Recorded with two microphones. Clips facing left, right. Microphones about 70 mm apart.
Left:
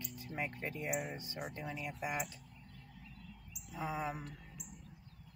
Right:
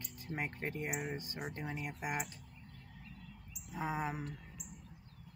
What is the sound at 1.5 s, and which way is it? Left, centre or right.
Speech, right.